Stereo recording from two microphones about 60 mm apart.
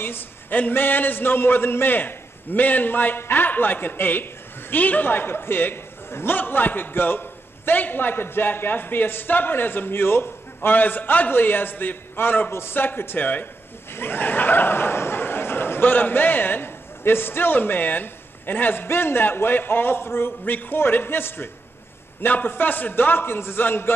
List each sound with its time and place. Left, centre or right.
0.0 s speech: left